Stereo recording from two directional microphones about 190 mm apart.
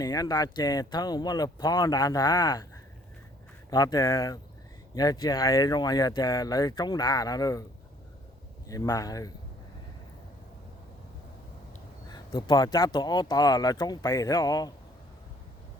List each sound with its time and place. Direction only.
0.0 s speech: 20° left (ahead or behind)
8.6 s speech: 20° left (ahead or behind)
12.1 s speech: 20° left (ahead or behind)